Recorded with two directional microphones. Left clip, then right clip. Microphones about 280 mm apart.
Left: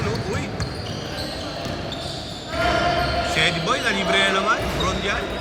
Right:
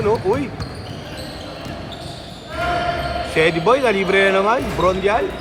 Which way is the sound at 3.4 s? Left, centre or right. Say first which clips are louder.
Right 9 dB; centre.